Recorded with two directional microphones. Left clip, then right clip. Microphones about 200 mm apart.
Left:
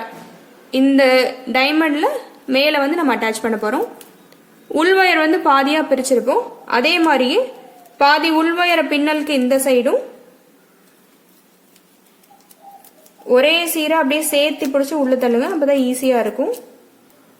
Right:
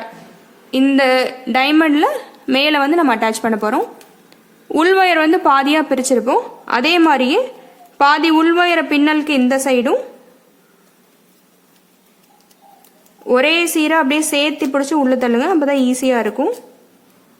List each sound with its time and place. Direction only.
0.7 s speech: 30° right (ahead or behind)
13.2 s a woman's voice: 30° right (ahead or behind)